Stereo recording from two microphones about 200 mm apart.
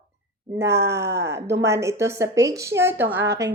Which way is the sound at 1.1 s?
15° right (ahead or behind).